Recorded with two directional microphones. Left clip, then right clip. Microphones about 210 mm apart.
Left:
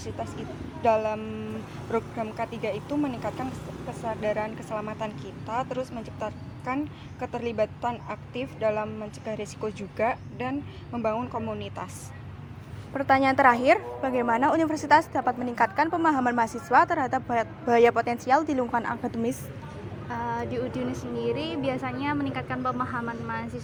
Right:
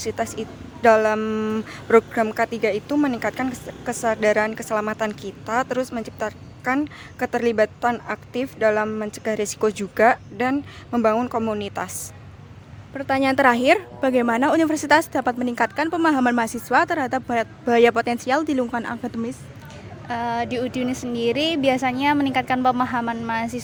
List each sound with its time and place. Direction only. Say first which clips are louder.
0.0 s speech: right 9 dB; 55° right (ahead or behind)
12.9 s a woman's voice: right 1 dB; 20° right (ahead or behind); by 23.6 s 45° right (ahead or behind)